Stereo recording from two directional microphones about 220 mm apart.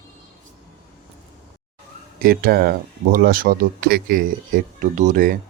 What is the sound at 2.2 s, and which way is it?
Speech, 45° right (ahead or behind).